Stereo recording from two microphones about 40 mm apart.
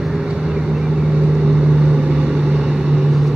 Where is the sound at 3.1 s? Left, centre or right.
Centre.